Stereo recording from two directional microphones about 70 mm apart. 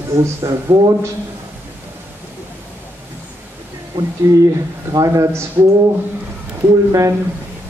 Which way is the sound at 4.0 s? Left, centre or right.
Right.